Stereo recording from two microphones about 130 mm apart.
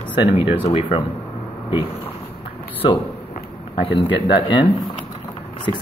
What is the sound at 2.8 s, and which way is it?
Speech, 45° left (ahead or behind).